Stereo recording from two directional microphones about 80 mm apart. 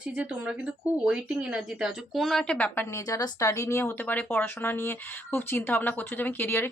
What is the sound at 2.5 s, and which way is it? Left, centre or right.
Speech, left.